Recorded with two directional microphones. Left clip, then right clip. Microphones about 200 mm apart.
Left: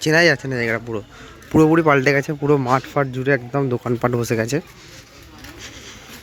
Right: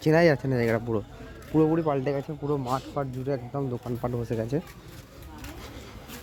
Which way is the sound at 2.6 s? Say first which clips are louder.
Left 11 dB; 45° left (ahead or behind).